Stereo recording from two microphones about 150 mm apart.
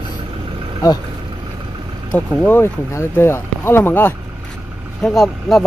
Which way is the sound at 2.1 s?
10° left (ahead or behind).